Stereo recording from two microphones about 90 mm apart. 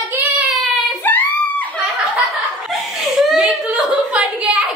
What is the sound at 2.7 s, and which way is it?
Laughter, centre (ahead or behind).